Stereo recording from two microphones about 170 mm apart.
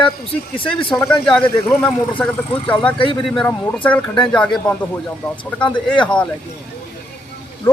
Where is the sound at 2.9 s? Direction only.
30° left (ahead or behind).